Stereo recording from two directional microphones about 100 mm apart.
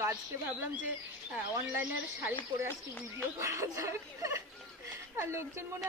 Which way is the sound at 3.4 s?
30° right (ahead or behind).